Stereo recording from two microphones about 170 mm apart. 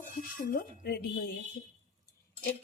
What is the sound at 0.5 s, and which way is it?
Speech, 70° left (ahead or behind).